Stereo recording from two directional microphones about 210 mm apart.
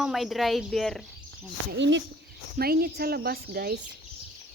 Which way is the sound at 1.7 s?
60° right (ahead or behind).